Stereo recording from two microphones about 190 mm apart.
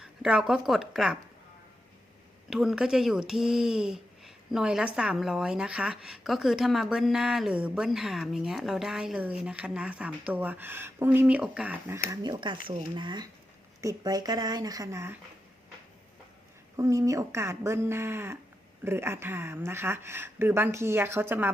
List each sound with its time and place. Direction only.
0.0 s speech: 5° right (ahead or behind)
2.5 s speech: centre (ahead or behind)
12.1 s speech: 20° right (ahead or behind)
16.7 s speech: 15° right (ahead or behind)